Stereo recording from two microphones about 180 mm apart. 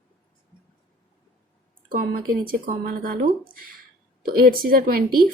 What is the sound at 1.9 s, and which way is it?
Speech, 55° right (ahead or behind).